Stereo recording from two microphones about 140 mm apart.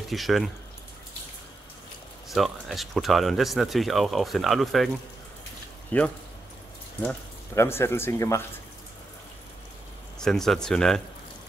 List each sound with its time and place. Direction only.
0.1 s speech: centre (ahead or behind)
2.3 s speech: centre (ahead or behind); by 8.4 s 20° left (ahead or behind)
10.1 s speech: 5° left (ahead or behind)